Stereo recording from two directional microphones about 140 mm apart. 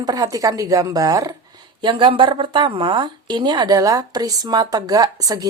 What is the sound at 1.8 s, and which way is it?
A woman's voice, 35° right (ahead or behind).